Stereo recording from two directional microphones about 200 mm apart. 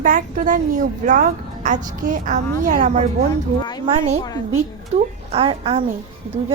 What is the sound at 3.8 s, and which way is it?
A woman's voice, 30° right (ahead or behind).